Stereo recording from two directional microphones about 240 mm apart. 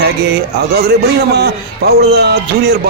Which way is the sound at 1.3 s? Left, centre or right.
Right.